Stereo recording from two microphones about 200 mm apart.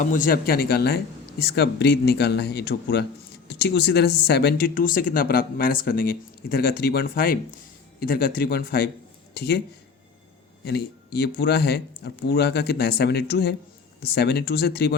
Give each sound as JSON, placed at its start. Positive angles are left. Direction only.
{"t": 0.0, "sound": "speech", "side_deg": 40}
{"t": 10.7, "sound": "speech", "side_deg": 55}